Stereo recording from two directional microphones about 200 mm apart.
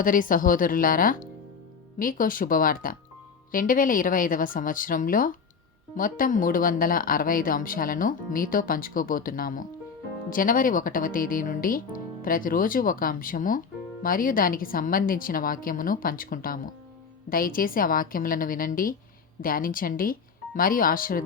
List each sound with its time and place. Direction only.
0.0 s speech: 45° left (ahead or behind)